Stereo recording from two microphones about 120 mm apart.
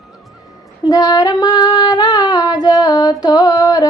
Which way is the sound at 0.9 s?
30° left (ahead or behind).